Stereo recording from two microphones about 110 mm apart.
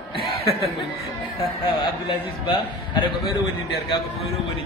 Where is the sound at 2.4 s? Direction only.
45° left (ahead or behind).